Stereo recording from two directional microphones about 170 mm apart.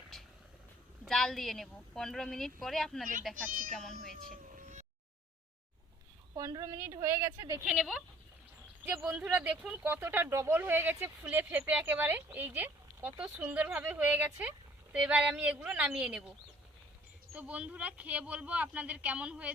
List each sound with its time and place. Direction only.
1.0 s a woman's voice: centre (ahead or behind)
4.3 s vehicle: 50° right (ahead or behind)
6.3 s a woman's voice: 20° right (ahead or behind)
7.6 s a woman's voice: 5° right (ahead or behind)
17.3 s speech: 10° right (ahead or behind)